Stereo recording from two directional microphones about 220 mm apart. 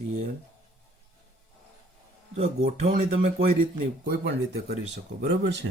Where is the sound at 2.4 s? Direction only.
30° right (ahead or behind).